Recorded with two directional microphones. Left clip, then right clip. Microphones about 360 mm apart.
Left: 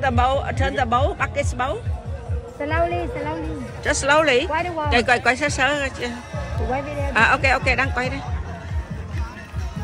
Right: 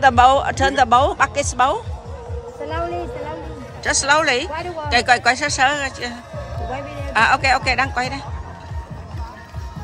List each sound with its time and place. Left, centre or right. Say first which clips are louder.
0.0 s speech: right 8 dB; centre
2.6 s speech: left 3 dB; left
3.8 s speech: right 1 dB; centre
7.2 s speech: right 2 dB; centre